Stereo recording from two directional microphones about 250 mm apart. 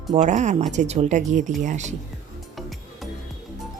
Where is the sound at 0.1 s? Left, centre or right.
Right.